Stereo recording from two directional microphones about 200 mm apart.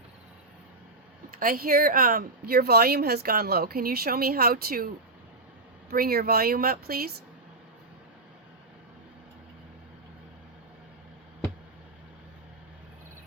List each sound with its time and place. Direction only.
1.4 s a woman's voice: 45° right (ahead or behind)
5.9 s a woman's voice: 50° right (ahead or behind)